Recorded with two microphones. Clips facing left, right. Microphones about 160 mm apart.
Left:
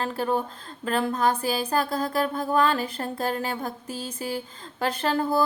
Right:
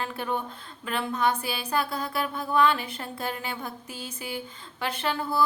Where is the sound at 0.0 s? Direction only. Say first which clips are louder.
Left 5 dB; 35° left (ahead or behind).